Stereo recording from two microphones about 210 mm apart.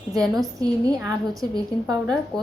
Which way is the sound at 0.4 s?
15° right (ahead or behind).